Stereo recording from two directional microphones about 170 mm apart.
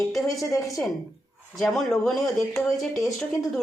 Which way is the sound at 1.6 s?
Centre (ahead or behind).